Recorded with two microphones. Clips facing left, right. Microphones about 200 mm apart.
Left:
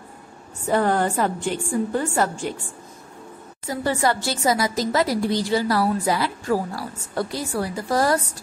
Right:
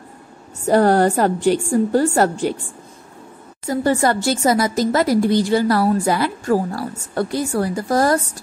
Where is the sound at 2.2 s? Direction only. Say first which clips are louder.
Right 7 dB; 65° right (ahead or behind).